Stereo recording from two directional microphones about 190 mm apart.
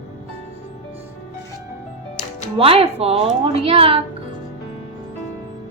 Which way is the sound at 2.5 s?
30° right (ahead or behind).